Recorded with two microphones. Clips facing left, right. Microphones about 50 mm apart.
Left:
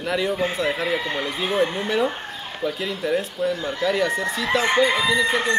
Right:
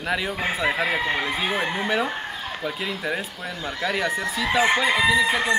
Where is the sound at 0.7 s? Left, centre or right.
Right.